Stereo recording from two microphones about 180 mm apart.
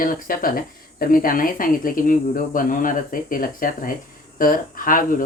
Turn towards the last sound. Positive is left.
turn(degrees=50)  # may be behind; listen again after turning